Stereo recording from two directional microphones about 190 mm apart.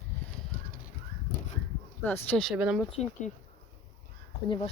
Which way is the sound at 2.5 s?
5° right (ahead or behind).